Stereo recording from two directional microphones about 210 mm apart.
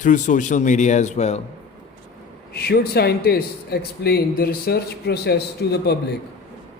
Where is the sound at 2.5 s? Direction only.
50° left (ahead or behind).